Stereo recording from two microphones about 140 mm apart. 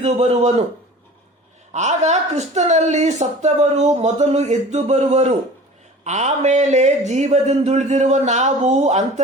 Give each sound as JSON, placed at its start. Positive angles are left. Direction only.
{"t": 0.0, "sound": "speech", "side_deg": -50}
{"t": 1.7, "sound": "speech", "side_deg": -55}